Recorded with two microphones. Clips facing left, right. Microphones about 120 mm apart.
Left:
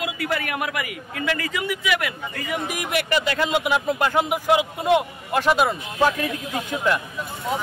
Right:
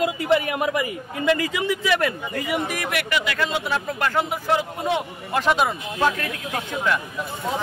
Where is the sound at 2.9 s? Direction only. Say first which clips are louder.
Left 5 dB; 35° left (ahead or behind).